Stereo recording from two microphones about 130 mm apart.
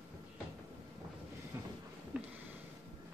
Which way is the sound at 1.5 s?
20° right (ahead or behind).